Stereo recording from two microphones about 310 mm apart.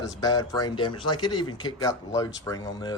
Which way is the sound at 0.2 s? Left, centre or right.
Centre.